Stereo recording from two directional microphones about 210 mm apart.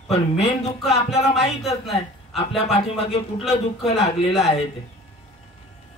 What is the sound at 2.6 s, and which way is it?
A man's voice, 30° left (ahead or behind).